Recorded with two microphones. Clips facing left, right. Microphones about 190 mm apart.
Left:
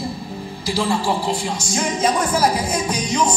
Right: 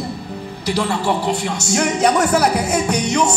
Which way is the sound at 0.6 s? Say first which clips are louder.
Right 1 dB; 65° right (ahead or behind).